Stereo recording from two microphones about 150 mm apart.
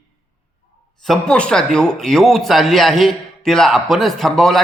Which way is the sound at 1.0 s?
5° left (ahead or behind).